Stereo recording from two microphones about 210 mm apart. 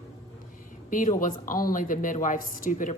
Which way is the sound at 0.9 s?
40° left (ahead or behind).